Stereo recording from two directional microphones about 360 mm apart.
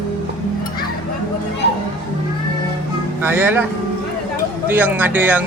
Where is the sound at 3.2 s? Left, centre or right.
Centre.